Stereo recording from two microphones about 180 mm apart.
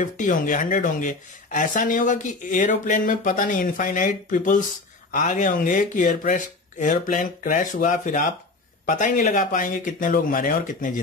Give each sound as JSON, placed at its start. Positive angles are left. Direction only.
{"t": 0.0, "sound": "speech", "side_deg": 45}